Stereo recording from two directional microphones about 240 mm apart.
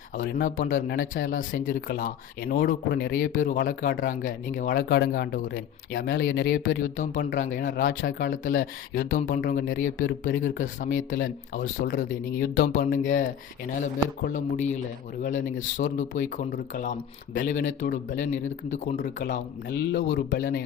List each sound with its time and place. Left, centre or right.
0.2 s speech: left
6.9 s speech: left